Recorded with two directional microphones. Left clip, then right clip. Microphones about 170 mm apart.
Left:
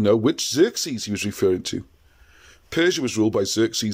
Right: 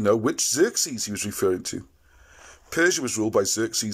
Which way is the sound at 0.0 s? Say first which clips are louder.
Left 2 dB; 25° left (ahead or behind).